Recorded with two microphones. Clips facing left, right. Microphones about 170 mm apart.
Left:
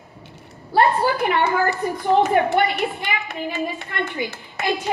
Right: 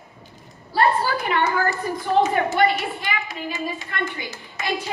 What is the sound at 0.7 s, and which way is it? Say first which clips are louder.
A woman's voice: left 3 dB; 60° left (ahead or behind).